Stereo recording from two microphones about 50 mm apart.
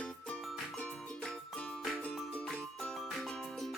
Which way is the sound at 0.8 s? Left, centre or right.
Left.